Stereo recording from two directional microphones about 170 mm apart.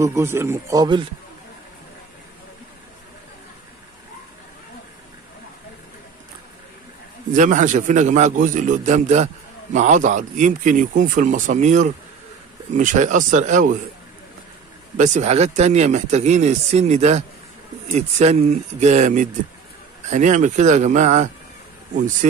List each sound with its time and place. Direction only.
0.0 s speech: 15° right (ahead or behind)
7.3 s a man's voice: 50° right (ahead or behind)
15.0 s speech: 45° right (ahead or behind)
18.2 s a man's voice: 40° right (ahead or behind)